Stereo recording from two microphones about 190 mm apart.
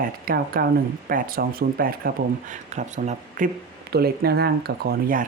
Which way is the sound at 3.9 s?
55° right (ahead or behind).